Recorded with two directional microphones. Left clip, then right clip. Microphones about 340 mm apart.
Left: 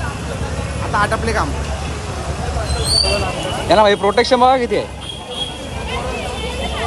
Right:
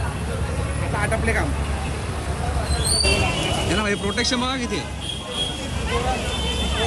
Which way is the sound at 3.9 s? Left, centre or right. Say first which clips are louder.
Left 9 dB; left.